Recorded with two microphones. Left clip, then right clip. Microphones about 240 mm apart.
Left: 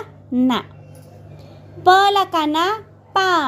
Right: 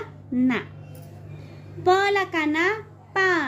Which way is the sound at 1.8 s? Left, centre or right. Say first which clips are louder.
Left 7 dB; left.